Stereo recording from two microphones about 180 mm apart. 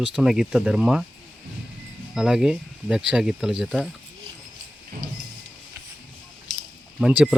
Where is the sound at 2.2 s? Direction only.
5° right (ahead or behind).